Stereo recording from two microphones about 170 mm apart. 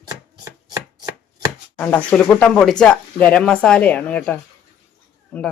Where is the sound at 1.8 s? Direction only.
10° left (ahead or behind).